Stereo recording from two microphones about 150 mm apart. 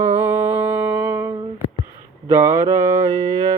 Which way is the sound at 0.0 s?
15° right (ahead or behind).